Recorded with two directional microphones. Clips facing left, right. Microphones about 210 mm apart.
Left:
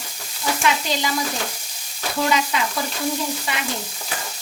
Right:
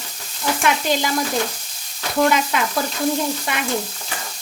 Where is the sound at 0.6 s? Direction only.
50° right (ahead or behind).